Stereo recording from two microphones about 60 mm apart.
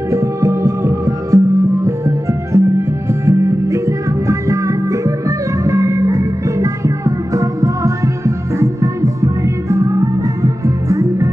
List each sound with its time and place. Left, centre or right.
0.1 s music: right